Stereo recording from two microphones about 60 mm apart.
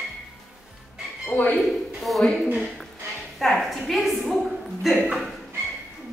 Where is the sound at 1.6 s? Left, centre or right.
Centre.